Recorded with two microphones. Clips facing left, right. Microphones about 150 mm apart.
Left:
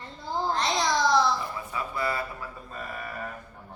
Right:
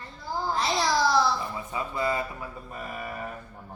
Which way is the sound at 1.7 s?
20° right (ahead or behind).